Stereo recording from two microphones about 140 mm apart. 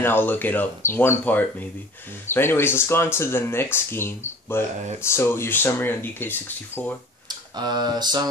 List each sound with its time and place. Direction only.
0.0 s speech: 15° left (ahead or behind)
7.2 s speech: 30° right (ahead or behind)